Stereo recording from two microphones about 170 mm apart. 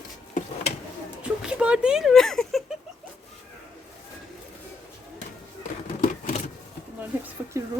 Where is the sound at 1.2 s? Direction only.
5° right (ahead or behind).